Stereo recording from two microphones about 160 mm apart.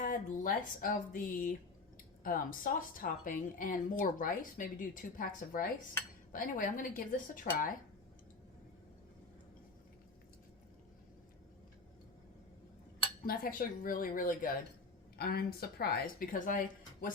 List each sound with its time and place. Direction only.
0.0 s speech: 60° left (ahead or behind)
13.2 s speech: 65° left (ahead or behind)
15.2 s speech: 70° left (ahead or behind)